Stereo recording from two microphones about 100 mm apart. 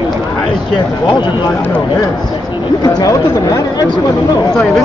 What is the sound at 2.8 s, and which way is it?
Speech, 40° left (ahead or behind).